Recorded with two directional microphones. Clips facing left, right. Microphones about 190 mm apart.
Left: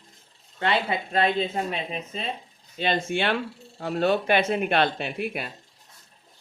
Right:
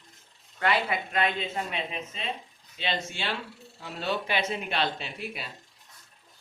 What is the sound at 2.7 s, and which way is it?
A man's voice, 50° left (ahead or behind).